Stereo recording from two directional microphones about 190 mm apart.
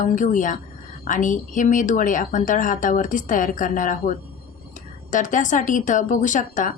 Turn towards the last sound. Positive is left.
turn(degrees=40)  # may be behind; listen again after turning